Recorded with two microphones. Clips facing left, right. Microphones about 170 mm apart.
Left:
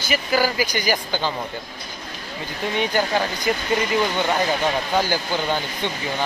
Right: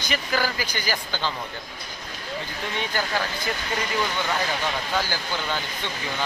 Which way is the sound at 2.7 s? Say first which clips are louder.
Left 6 dB; 20° left (ahead or behind).